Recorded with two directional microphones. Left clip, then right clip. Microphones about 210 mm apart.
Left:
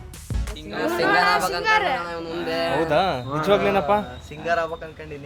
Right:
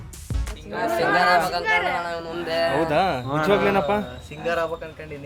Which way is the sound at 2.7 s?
Centre (ahead or behind).